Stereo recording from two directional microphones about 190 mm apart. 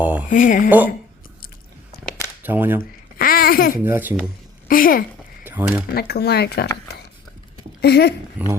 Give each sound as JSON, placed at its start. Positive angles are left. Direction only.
{"t": 0.0, "sound": "a sound", "side_deg": -10}
{"t": 0.3, "sound": "speech", "side_deg": 45}
{"t": 2.4, "sound": "speech", "side_deg": -10}
{"t": 3.2, "sound": "babbling", "side_deg": 50}
{"t": 3.8, "sound": "speech", "side_deg": -10}
{"t": 4.7, "sound": "speech", "side_deg": 50}
{"t": 5.4, "sound": "a sound", "side_deg": -10}
{"t": 5.9, "sound": "speech", "side_deg": 55}
{"t": 7.8, "sound": "speech", "side_deg": 60}
{"t": 8.4, "sound": "speech", "side_deg": -10}